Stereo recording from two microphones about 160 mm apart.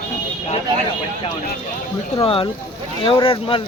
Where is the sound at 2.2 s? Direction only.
35° left (ahead or behind).